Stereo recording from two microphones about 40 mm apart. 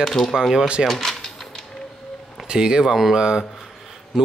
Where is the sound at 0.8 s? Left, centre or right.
Centre.